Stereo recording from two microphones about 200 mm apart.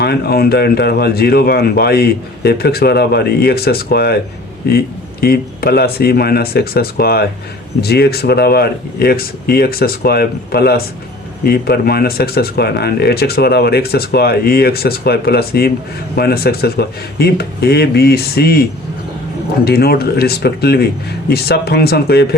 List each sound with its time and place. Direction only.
0.0 s speech: 50° left (ahead or behind)